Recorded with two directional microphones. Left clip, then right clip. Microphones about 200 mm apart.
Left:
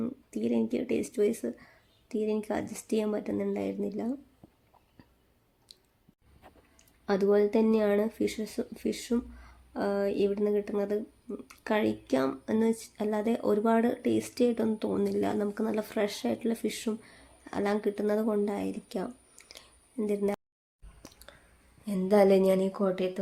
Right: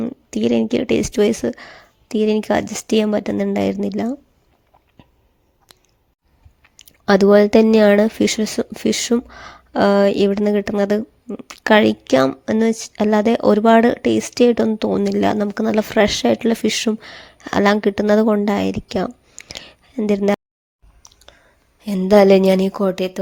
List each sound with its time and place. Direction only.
0.0 s speech: 45° right (ahead or behind)
6.7 s speech: 50° right (ahead or behind)
21.1 s clicking: 25° right (ahead or behind)
21.8 s speech: 45° right (ahead or behind)